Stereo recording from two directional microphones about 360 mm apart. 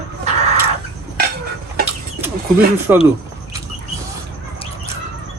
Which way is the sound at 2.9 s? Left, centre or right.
Centre.